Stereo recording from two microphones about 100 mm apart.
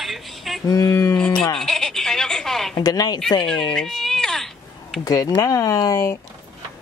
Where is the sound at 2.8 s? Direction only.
45° left (ahead or behind).